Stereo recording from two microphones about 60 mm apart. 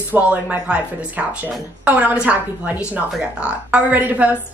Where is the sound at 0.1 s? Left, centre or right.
Right.